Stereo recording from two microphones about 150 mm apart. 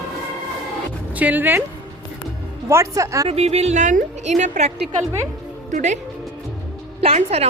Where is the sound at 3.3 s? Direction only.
45° right (ahead or behind).